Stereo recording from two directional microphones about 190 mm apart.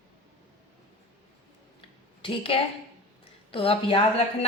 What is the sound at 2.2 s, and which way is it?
A woman's voice, 30° left (ahead or behind).